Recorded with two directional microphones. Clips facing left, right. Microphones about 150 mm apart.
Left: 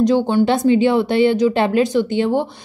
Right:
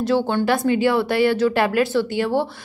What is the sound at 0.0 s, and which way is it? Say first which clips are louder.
Speech: left 5 dB; 15° left (ahead or behind).